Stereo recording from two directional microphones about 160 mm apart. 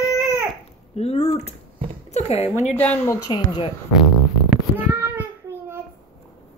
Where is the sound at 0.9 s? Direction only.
40° left (ahead or behind).